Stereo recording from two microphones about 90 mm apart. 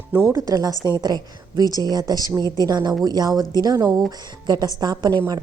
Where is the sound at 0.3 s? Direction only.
40° right (ahead or behind).